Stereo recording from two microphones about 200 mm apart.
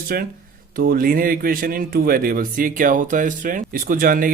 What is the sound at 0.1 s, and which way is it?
Speech, 50° right (ahead or behind).